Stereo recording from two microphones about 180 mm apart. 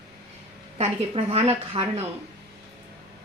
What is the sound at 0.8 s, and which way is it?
A woman's voice, 35° right (ahead or behind).